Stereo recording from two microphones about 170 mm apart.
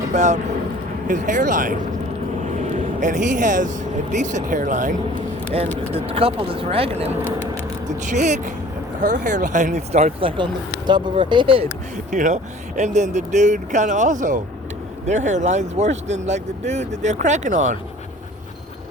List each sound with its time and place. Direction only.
0.1 s speech: 45° right (ahead or behind)
2.7 s speech: 45° right (ahead or behind)
5.9 s speech: 35° right (ahead or behind)
7.1 s speech: 15° right (ahead or behind)
7.9 s speech: 45° right (ahead or behind)
12.1 s speech: 45° right (ahead or behind)